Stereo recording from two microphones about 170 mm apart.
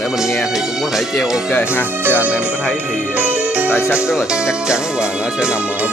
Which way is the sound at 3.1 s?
10° right (ahead or behind).